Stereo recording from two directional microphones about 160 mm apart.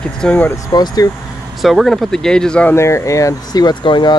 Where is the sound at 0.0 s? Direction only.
5° left (ahead or behind); by 1.1 s 25° left (ahead or behind).